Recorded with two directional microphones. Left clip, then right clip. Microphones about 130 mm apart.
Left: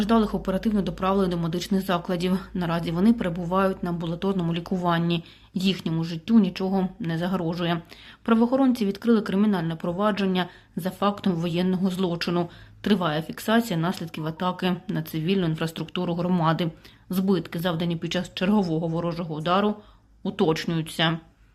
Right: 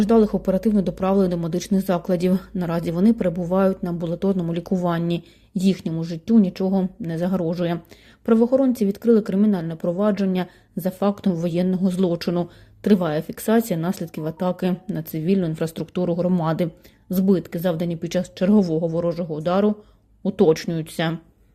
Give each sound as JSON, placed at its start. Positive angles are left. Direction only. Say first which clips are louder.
{"t": 0.0, "sound": "speech", "louder": "right 5 dB", "side_deg": -45}